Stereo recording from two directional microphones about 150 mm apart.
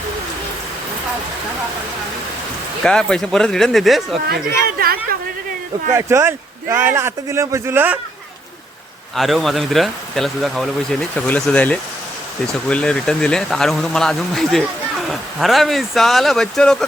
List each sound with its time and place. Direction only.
2.8 s speech: 5° left (ahead or behind)
4.3 s speech: 90° right
5.9 s a man's voice: 20° right (ahead or behind)
9.1 s speech: centre (ahead or behind)